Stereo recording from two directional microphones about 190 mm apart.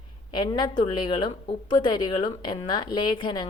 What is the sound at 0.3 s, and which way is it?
A woman's voice, 20° left (ahead or behind).